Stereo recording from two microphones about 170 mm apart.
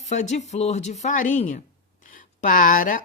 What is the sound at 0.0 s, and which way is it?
A woman's voice, 45° left (ahead or behind).